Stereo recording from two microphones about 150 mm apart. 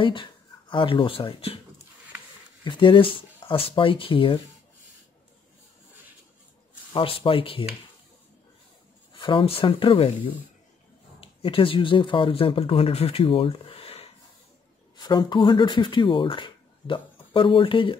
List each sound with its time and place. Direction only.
0.0 s speech: 35° left (ahead or behind)
2.6 s speech: 30° left (ahead or behind)
6.9 s speech: 35° left (ahead or behind)
9.1 s speech: 35° left (ahead or behind)
15.0 s speech: 30° left (ahead or behind)